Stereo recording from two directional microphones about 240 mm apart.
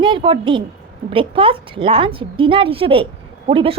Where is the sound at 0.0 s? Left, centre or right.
Right.